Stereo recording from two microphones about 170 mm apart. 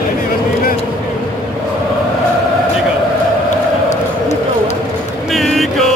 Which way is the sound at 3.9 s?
40° left (ahead or behind).